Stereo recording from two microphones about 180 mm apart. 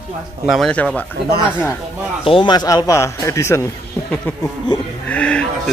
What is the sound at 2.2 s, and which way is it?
Speech, 30° left (ahead or behind).